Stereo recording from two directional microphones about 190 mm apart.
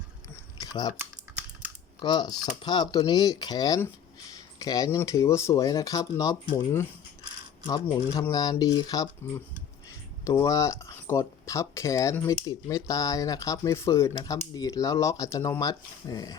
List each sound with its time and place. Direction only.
0.6 s typing: 20° left (ahead or behind)
2.0 s speech: 20° left (ahead or behind)
7.7 s speech: 20° left (ahead or behind)
10.2 s speech: 15° left (ahead or behind)